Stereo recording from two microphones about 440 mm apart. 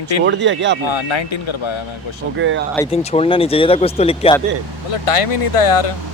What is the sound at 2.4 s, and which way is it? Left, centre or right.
Speech, right.